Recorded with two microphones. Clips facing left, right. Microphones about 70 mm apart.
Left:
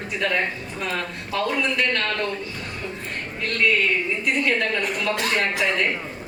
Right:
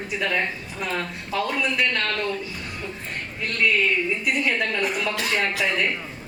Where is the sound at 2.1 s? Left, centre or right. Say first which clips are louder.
Even; centre.